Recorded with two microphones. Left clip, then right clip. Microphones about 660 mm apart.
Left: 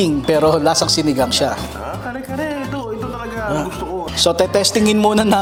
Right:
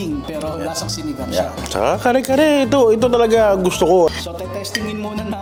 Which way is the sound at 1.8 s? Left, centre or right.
Right.